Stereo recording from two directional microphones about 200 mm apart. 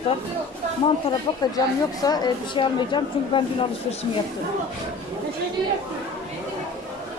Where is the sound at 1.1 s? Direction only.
20° left (ahead or behind).